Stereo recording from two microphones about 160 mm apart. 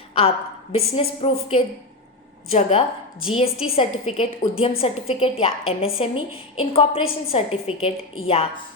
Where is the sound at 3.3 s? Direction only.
35° left (ahead or behind).